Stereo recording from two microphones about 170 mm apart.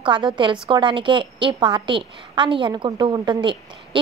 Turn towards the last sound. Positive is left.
turn(degrees=-30)  # may be behind; listen again after turning